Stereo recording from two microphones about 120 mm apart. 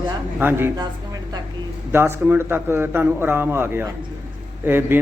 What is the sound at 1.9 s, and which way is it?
A man's voice, 20° right (ahead or behind).